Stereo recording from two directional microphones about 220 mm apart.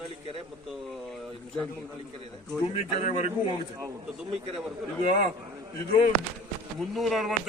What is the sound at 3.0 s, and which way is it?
Speech, 30° left (ahead or behind).